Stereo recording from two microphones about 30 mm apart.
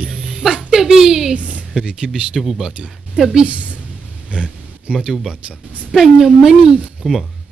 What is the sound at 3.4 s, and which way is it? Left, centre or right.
Speech, right.